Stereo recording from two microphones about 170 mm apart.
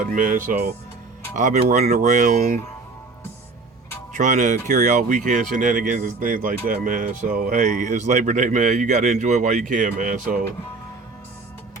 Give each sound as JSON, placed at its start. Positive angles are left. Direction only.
{"t": 0.0, "sound": "speech", "side_deg": -50}
{"t": 4.2, "sound": "speech", "side_deg": -45}